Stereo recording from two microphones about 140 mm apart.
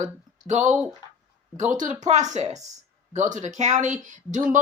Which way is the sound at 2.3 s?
50° right (ahead or behind).